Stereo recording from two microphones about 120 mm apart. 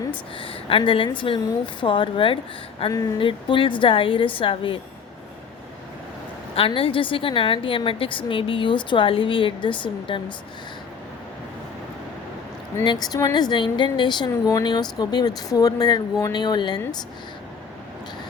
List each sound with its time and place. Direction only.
0.3 s a woman's voice: 45° left (ahead or behind)
6.6 s a woman's voice: 50° left (ahead or behind)
12.8 s a woman's voice: 35° left (ahead or behind)